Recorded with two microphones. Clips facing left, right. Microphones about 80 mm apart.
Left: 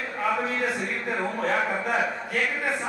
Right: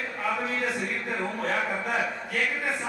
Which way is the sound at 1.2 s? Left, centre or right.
Left.